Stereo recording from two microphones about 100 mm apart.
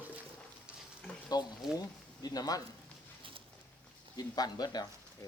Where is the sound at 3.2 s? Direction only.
60° right (ahead or behind).